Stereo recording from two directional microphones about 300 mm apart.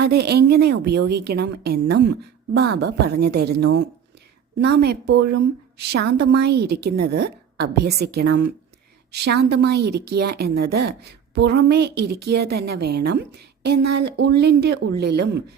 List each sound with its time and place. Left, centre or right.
0.0 s a woman's voice: right